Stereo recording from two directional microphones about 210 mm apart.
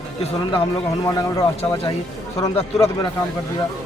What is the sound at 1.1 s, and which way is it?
Speech, 15° left (ahead or behind).